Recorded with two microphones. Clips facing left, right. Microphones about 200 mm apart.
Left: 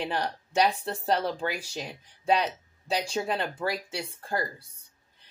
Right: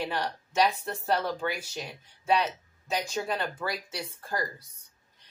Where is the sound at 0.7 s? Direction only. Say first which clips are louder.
Left 2 dB; 35° left (ahead or behind).